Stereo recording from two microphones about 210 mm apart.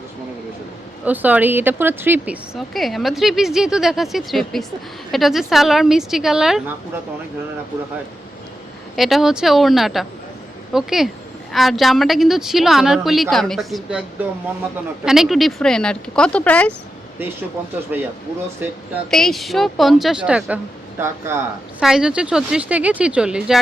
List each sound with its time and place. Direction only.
1.0 s speech: 10° right (ahead or behind)
9.0 s speech: centre (ahead or behind)
15.0 s speech: centre (ahead or behind)
17.9 s a woman's voice: 10° right (ahead or behind)